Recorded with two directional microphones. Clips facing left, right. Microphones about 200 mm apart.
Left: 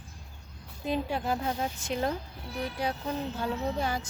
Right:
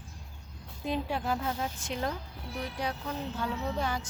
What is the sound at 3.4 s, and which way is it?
Music, 35° left (ahead or behind).